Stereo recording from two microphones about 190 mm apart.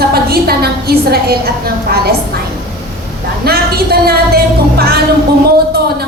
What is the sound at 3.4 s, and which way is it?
A woman's voice, 55° right (ahead or behind).